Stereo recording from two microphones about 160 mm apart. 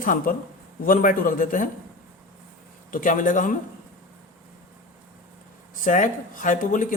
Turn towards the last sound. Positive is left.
turn(degrees=55)  # may be behind; listen again after turning